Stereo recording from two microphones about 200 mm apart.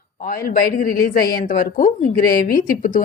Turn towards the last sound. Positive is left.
turn(degrees=40)  # may be behind; listen again after turning